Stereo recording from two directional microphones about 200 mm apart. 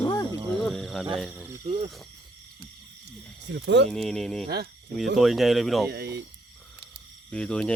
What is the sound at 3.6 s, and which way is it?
Speech, 60° right (ahead or behind).